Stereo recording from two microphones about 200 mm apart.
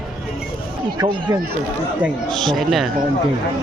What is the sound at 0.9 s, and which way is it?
Speech, 20° right (ahead or behind).